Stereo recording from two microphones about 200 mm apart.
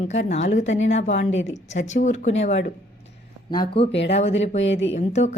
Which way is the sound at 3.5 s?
25° left (ahead or behind).